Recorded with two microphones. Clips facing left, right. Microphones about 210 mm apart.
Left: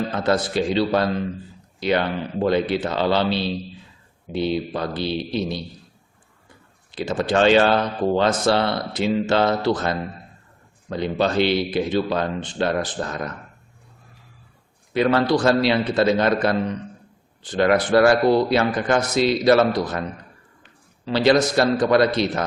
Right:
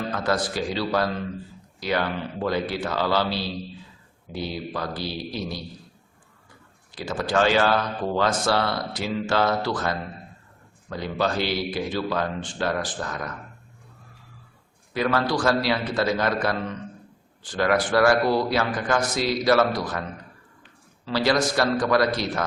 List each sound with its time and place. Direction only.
0.3 s speech: 25° left (ahead or behind)
6.9 s speech: 25° left (ahead or behind)
14.9 s speech: 25° left (ahead or behind)
21.0 s speech: 20° left (ahead or behind)